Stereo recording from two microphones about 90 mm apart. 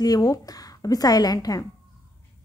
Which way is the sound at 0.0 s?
45° left (ahead or behind).